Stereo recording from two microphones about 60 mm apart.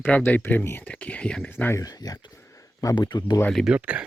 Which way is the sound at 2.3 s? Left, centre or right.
Left.